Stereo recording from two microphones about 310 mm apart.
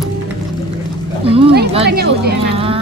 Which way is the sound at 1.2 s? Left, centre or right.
Centre.